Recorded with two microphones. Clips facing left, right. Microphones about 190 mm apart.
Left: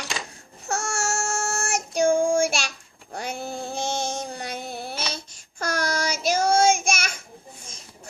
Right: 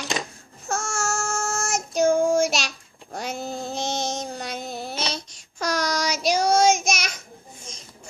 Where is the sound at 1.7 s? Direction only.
15° left (ahead or behind).